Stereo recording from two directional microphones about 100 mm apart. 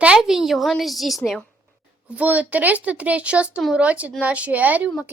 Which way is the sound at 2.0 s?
15° right (ahead or behind).